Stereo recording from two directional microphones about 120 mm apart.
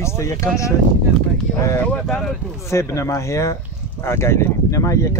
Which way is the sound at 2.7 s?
25° left (ahead or behind).